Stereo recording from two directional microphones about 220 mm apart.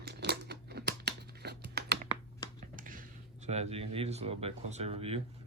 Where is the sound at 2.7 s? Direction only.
40° right (ahead or behind).